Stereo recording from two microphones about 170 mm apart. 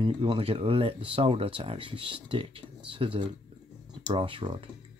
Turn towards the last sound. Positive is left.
turn(degrees=-30)  # may be behind; listen again after turning